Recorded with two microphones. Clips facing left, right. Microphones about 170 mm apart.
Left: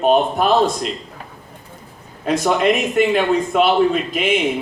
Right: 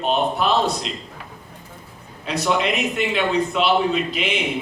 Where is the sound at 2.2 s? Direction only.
50° left (ahead or behind).